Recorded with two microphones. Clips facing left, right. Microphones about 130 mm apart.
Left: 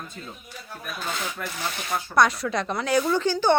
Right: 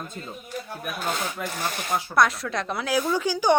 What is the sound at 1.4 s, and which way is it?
Speech, 20° right (ahead or behind).